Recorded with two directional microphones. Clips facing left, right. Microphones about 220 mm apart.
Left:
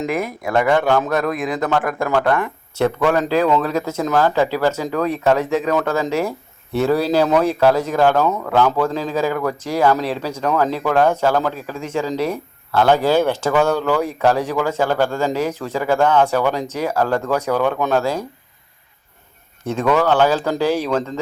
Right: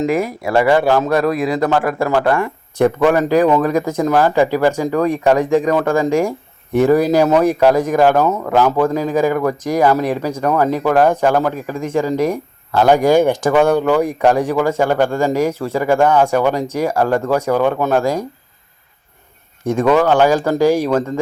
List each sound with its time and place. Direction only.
0.5 s speech: 5° right (ahead or behind)
19.6 s speech: 10° right (ahead or behind)